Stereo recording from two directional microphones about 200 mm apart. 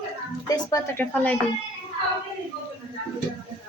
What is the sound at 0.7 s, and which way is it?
Speech, 10° left (ahead or behind).